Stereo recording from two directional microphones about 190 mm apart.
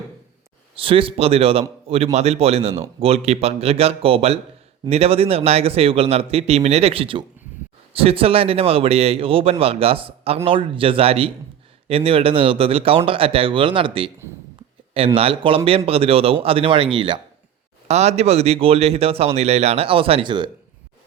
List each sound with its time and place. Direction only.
0.8 s a man's voice: 30° right (ahead or behind)